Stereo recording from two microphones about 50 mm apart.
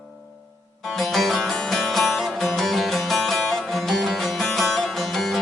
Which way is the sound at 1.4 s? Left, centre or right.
Centre.